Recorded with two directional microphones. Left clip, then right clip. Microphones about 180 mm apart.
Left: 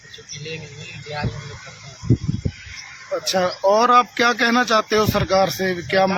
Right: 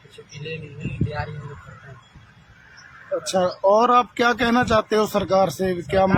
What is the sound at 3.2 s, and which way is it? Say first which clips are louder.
Speech: left 1 dB; centre (ahead or behind).